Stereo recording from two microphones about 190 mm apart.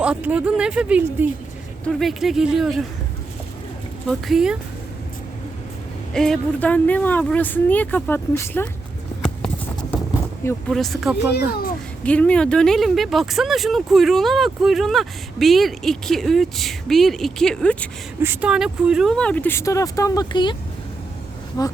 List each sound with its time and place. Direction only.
0.0 s speech: 5° right (ahead or behind)
4.1 s speech: centre (ahead or behind)
6.1 s speech: 5° left (ahead or behind)
10.7 s speech: centre (ahead or behind)
11.3 s a child's voice: 55° left (ahead or behind)
12.0 s speech: 5° left (ahead or behind)
18.2 s speech: 10° right (ahead or behind); by 20.6 s 25° left (ahead or behind)